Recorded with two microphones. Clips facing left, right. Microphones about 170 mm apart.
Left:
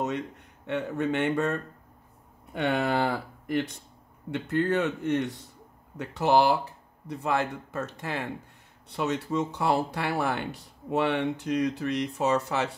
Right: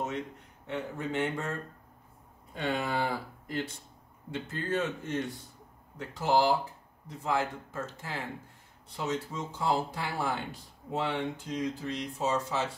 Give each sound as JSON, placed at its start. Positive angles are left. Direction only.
{"t": 0.7, "sound": "speech", "side_deg": 70}